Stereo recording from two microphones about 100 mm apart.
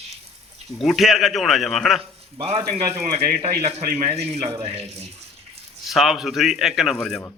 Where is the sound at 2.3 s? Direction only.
80° right.